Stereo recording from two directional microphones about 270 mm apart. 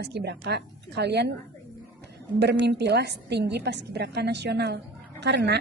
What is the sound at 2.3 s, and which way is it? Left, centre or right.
A woman's voice, right.